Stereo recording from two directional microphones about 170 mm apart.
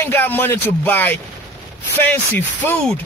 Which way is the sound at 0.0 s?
10° left (ahead or behind).